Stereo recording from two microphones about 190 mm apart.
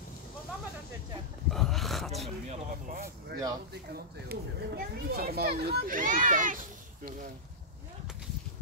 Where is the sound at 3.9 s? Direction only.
55° right (ahead or behind).